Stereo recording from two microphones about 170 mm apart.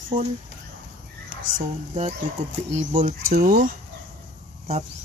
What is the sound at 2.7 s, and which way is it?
Speech, 40° right (ahead or behind).